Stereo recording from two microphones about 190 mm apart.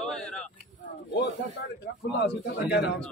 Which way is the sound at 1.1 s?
65° left (ahead or behind).